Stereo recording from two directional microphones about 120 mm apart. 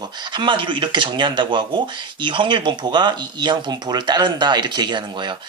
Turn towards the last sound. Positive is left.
turn(degrees=-40)  # may be behind; listen again after turning